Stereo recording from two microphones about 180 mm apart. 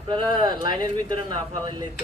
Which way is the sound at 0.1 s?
25° right (ahead or behind).